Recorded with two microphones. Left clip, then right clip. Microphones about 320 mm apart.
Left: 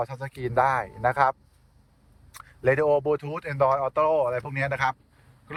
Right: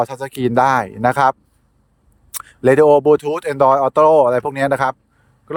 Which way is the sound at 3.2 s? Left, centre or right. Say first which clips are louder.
Right 10 dB; right.